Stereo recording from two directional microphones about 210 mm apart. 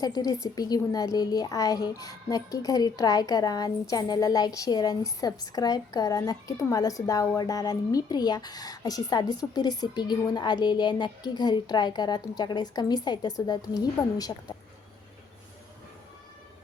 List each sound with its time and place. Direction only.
0.0 s a woman's voice: 15° left (ahead or behind)